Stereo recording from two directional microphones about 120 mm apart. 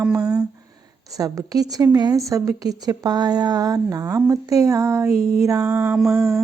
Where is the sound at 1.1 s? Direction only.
30° right (ahead or behind).